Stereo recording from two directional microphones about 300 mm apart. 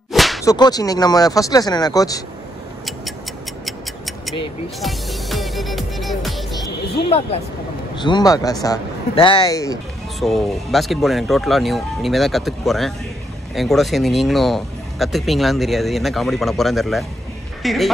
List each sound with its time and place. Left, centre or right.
0.1 s whip: centre
0.5 s speech: centre
4.3 s music: centre
7.1 s speech: centre
10.2 s speech: centre